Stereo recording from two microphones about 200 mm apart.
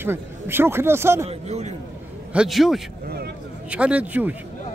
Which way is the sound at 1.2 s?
35° right (ahead or behind).